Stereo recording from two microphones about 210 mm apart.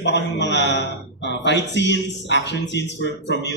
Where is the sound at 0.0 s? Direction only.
55° left (ahead or behind).